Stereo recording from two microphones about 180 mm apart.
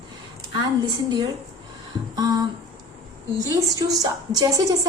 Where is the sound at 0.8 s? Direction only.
25° right (ahead or behind).